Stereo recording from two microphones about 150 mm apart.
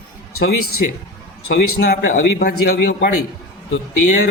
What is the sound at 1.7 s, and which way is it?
A man's voice, 80° left.